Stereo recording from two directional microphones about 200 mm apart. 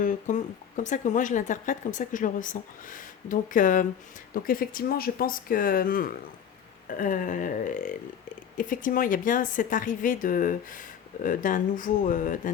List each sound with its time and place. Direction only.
0.0 s speech: 40° left (ahead or behind)